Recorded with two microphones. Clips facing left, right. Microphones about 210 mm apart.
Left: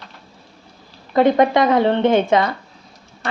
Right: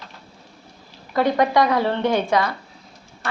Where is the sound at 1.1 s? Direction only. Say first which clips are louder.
Left 4 dB; 20° left (ahead or behind).